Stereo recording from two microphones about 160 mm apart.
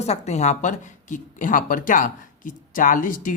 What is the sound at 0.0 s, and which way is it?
Speech, 45° left (ahead or behind).